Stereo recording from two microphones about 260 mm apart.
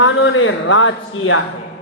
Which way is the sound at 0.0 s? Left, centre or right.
Left.